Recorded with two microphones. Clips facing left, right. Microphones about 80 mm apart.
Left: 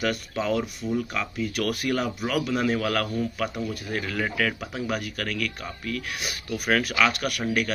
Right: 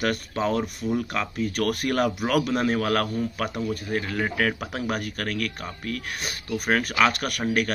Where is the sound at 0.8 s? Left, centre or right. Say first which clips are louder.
Right 1 dB; right.